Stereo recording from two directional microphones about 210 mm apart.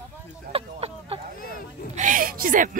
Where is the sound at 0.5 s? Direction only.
25° right (ahead or behind).